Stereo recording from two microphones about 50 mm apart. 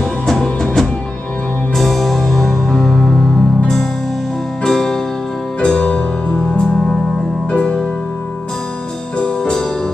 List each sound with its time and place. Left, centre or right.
0.3 s music: centre
4.6 s music: centre
9.2 s music: centre